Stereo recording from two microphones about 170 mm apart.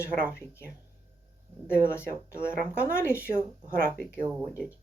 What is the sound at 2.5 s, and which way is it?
Speech, 5° right (ahead or behind).